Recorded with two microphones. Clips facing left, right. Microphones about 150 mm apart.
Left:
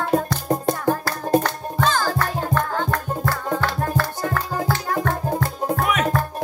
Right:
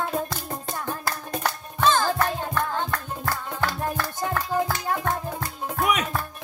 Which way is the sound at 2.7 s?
45° left (ahead or behind).